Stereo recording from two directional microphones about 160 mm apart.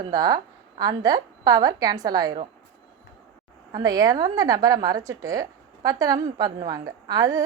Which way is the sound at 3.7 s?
25° right (ahead or behind).